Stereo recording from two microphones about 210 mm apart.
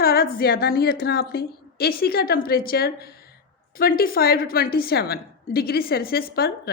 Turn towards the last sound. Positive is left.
turn(degrees=45)  # may be behind; listen again after turning